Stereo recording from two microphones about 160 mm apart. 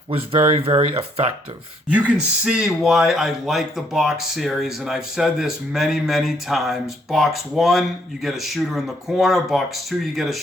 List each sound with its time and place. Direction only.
0.1 s speech: 35° right (ahead or behind)
1.9 s speech: 10° right (ahead or behind)